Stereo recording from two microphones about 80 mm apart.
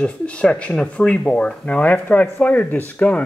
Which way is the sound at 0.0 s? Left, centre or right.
Centre.